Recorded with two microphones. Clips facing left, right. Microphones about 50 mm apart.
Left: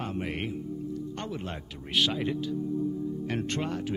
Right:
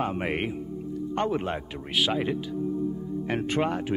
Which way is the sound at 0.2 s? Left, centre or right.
Right.